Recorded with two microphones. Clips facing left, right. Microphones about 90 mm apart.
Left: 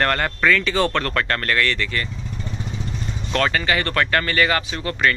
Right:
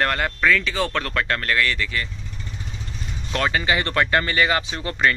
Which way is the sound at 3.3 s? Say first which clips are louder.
Left 1 dB; 15° right (ahead or behind).